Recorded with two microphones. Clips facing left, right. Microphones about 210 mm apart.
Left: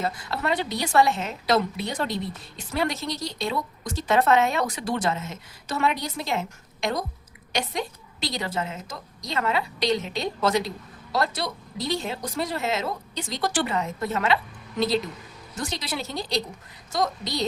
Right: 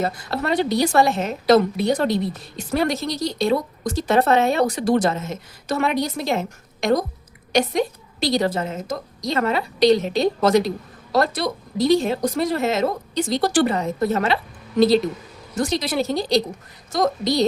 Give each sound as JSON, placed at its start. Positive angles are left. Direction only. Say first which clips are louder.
{"t": 0.0, "sound": "a woman's voice", "louder": "right 4 dB", "side_deg": -40}
{"t": 15.5, "sound": "speech", "louder": "right 9 dB", "side_deg": -40}